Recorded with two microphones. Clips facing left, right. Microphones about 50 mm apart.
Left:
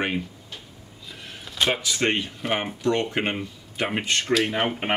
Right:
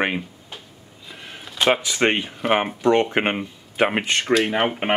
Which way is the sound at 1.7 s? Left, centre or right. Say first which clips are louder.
Right 6 dB; right.